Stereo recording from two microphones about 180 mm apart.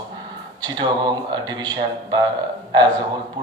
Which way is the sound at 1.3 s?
25° right (ahead or behind).